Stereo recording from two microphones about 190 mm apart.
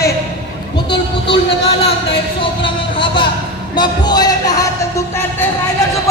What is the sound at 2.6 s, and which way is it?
A man's voice, 25° left (ahead or behind).